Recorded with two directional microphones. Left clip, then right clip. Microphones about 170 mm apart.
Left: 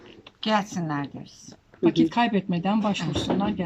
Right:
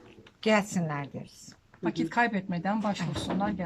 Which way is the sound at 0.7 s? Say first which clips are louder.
Left 4 dB; 30° right (ahead or behind).